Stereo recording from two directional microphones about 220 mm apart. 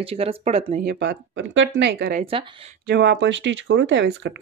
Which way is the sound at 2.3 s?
25° right (ahead or behind).